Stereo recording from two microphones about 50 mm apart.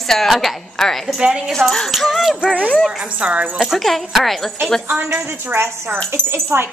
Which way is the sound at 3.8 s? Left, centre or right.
Centre.